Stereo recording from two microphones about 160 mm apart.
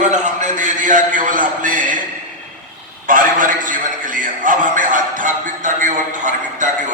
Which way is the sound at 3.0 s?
55° right (ahead or behind).